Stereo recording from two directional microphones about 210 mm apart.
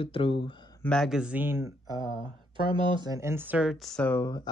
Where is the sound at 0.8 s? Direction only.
Centre (ahead or behind).